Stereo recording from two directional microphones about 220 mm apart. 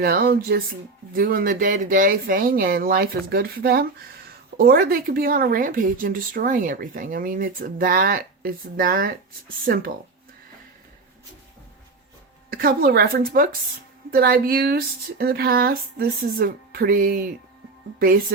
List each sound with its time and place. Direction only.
0.0 s speech: 45° right (ahead or behind)
12.5 s speech: 45° right (ahead or behind)